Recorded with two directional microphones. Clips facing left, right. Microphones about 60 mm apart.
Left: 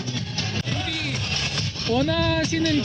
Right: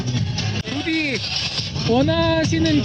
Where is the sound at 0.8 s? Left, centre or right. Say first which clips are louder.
Right 8 dB; right.